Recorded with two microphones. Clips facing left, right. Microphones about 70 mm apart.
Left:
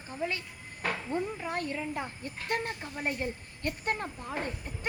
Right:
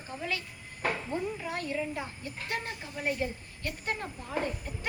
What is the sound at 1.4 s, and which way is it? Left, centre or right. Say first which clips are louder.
Speech: even; left.